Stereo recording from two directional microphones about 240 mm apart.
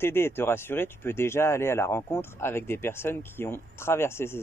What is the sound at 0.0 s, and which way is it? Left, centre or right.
Speech, centre.